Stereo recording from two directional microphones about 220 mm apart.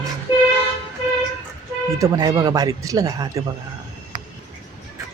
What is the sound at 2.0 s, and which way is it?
Speech, 15° right (ahead or behind).